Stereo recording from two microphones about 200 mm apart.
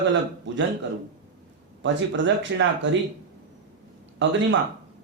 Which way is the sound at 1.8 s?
65° right (ahead or behind).